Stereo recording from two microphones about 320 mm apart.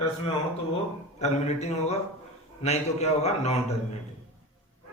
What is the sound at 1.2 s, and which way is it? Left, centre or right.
A man's voice, left.